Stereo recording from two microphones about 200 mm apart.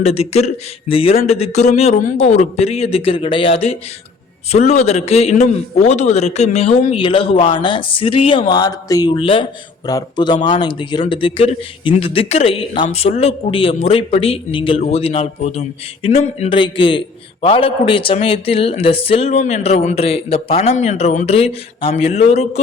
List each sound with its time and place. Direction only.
0.0 s a man's voice: 30° left (ahead or behind)